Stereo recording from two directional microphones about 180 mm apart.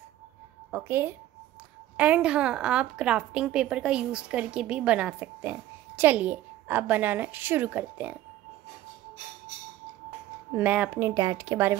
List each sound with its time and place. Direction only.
0.7 s a woman's voice: 10° right (ahead or behind)
10.5 s a woman's voice: 10° right (ahead or behind)